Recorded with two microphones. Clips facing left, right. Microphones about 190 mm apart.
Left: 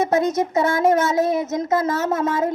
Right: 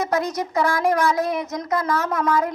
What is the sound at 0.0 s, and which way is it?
Speech, 20° left (ahead or behind).